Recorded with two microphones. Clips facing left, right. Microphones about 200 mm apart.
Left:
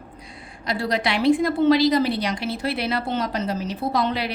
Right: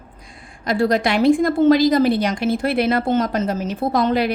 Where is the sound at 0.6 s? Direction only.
50° right (ahead or behind).